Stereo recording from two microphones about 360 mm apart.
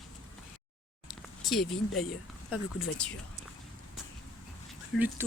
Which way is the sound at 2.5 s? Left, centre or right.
Centre.